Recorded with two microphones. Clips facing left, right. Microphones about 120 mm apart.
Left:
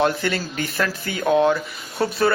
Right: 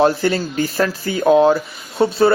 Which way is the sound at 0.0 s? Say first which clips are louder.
Right 6 dB; 35° right (ahead or behind).